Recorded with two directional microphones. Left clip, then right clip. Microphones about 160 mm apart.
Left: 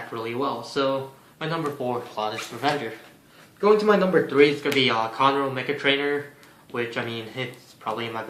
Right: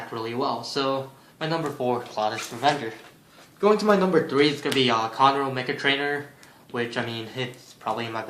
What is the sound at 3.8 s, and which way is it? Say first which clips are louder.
Speech: left 1 dB; 35° right (ahead or behind).